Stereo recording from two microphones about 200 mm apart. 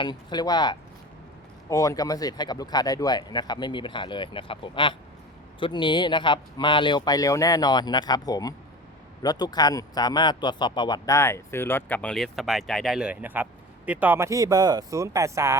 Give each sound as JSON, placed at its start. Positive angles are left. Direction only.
{"t": 0.0, "sound": "speech", "side_deg": 20}